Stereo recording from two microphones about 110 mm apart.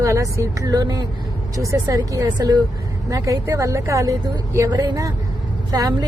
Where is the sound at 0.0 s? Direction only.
30° right (ahead or behind).